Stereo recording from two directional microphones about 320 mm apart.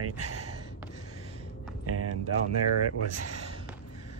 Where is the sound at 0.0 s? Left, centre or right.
Right.